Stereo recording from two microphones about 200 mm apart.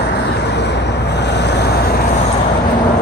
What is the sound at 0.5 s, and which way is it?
Vehicle, 60° left (ahead or behind).